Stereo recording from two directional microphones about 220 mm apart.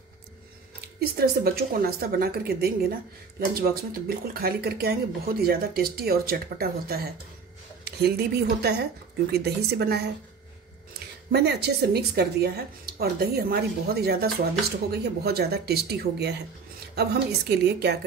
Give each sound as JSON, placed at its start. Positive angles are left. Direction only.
{"t": 0.7, "sound": "a woman's voice", "side_deg": -45}
{"t": 11.3, "sound": "speech", "side_deg": -50}